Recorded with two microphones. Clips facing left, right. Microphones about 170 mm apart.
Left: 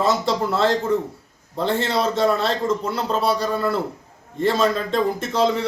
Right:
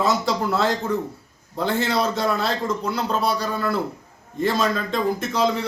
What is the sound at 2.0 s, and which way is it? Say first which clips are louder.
A man's voice: left 3 dB; centre (ahead or behind).